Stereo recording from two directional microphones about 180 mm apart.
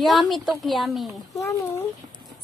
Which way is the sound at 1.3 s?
20° left (ahead or behind).